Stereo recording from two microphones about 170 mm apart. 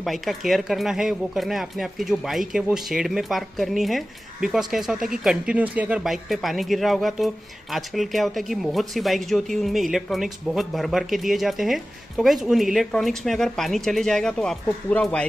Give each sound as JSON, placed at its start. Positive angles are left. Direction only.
{"t": 0.0, "sound": "speech", "side_deg": 0}